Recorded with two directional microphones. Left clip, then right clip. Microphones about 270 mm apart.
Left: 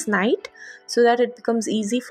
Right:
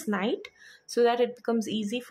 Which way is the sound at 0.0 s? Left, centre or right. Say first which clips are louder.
Left 9 dB; centre.